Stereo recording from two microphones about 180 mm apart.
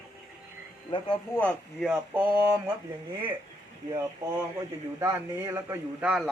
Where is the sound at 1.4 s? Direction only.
10° left (ahead or behind).